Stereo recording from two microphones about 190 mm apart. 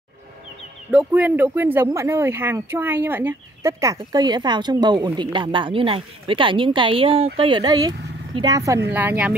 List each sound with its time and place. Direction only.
0.9 s a woman's voice: 10° right (ahead or behind)